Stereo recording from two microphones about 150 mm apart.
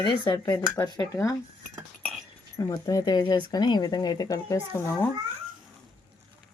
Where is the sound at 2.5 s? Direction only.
25° left (ahead or behind).